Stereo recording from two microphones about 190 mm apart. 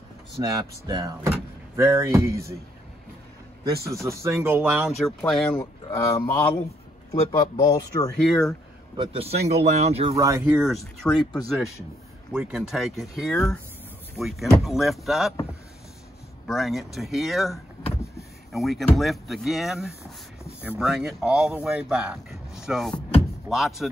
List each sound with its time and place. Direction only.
0.4 s speech: 20° right (ahead or behind)
3.6 s speech: 15° right (ahead or behind); by 5.5 s 5° left (ahead or behind)
5.5 s speech: 20° left (ahead or behind)
7.2 s speech: 25° left (ahead or behind)
8.9 s speech: 30° right (ahead or behind)
10.1 s speech: 15° right (ahead or behind)
11.0 s speech: 5° left (ahead or behind)
12.3 s speech: 5° right (ahead or behind)
16.4 s speech: centre (ahead or behind)